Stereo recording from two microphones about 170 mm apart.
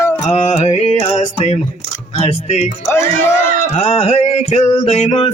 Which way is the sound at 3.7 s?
35° left (ahead or behind).